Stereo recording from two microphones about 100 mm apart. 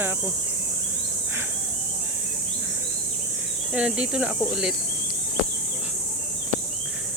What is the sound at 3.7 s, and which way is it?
Speech, 10° right (ahead or behind).